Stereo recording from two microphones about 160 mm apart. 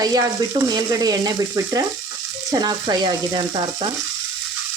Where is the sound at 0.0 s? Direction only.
25° right (ahead or behind).